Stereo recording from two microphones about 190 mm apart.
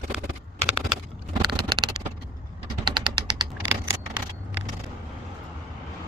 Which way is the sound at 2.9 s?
25° right (ahead or behind).